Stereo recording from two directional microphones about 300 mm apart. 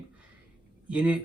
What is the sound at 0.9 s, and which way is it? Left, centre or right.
Speech, centre.